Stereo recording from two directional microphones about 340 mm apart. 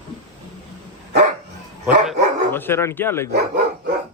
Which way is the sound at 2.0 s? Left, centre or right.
Centre.